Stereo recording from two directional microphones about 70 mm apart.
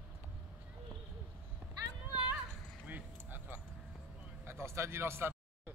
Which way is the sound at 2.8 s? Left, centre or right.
Right.